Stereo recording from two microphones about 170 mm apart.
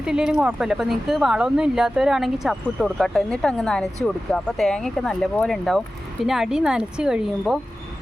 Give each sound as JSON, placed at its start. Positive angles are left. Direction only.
{"t": 0.0, "sound": "speech", "side_deg": -5}